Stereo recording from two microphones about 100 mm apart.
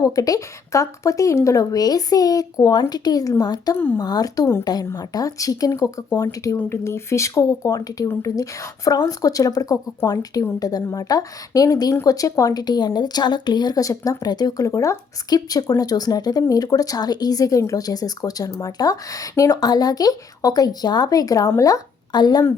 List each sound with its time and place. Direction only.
0.0 s speech: 35° left (ahead or behind)